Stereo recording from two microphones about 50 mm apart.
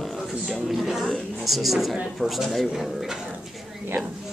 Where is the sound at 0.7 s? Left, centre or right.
Centre.